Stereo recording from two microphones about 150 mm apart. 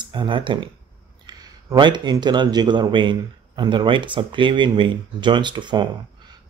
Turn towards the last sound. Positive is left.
turn(degrees=-30)  # may be behind; listen again after turning